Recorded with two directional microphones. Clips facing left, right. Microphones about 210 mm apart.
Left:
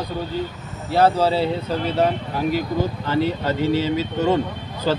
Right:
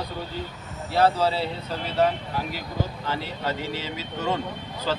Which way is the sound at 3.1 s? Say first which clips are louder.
Left 8 dB; 45° left (ahead or behind).